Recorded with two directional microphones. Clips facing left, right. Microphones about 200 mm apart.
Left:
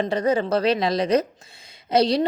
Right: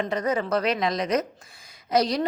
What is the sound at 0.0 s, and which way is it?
A woman's voice, 30° left (ahead or behind).